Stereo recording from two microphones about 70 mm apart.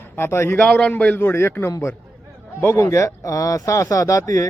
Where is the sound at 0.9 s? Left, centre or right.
Left.